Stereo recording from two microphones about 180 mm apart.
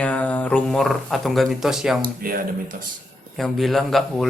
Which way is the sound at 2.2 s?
50° right (ahead or behind).